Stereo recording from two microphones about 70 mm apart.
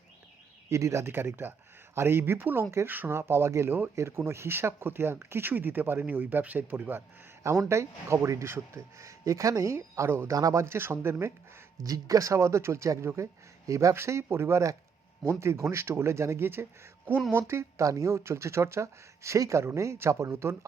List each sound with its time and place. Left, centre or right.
0.7 s speech: right
1.1 s speech: right
7.7 s speech: right
10.3 s speech: right
10.6 s speech: right
11.9 s speech: right
13.9 s speech: right